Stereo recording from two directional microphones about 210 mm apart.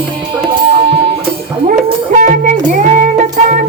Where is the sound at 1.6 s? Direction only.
35° right (ahead or behind).